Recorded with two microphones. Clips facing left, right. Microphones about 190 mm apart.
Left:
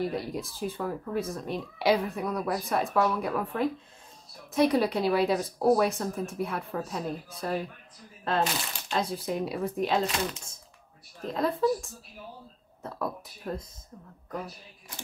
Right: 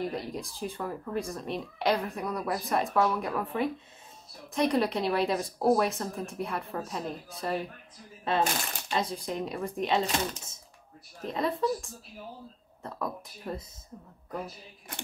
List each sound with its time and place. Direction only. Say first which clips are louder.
0.0 s a woman's voice: left 2 dB; 5° left (ahead or behind)
11.3 s a woman's voice: left 3 dB; centre (ahead or behind)